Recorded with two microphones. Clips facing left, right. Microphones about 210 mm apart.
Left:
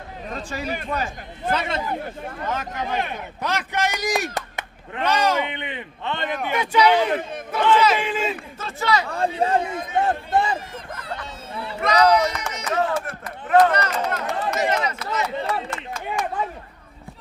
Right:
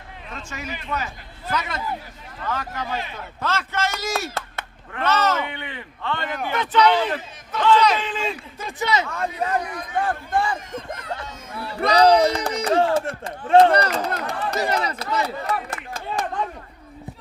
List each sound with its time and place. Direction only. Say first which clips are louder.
0.3 s a man's voice: left 5 dB; 35° left (ahead or behind)
2.0 s speech: left 11 dB; 55° left (ahead or behind)
2.4 s a man's voice: even; 20° left (ahead or behind)
7.2 s speech: left 10 dB; 55° left (ahead or behind)
7.8 s speech: left 1 dB; 5° left (ahead or behind)
8.5 s speech: even; 15° right (ahead or behind)
9.0 s speech: left 4 dB; 30° left (ahead or behind)
11.8 s speech: right 2 dB; 30° right (ahead or behind)
15.4 s speech: left 1 dB; 25° left (ahead or behind)
16.2 s a sound: even; 10° left (ahead or behind)